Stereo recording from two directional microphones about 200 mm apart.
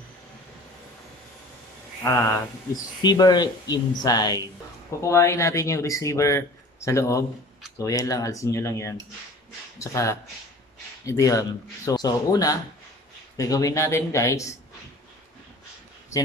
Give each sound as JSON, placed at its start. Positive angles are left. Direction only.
{"t": 2.0, "sound": "speech", "side_deg": 15}